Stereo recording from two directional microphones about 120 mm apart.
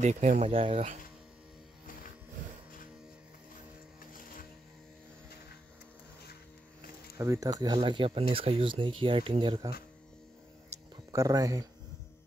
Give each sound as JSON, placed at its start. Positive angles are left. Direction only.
{"t": 0.0, "sound": "speech", "side_deg": -75}
{"t": 0.5, "sound": "speech", "side_deg": -50}
{"t": 7.2, "sound": "speech", "side_deg": -30}
{"t": 11.1, "sound": "speech", "side_deg": -30}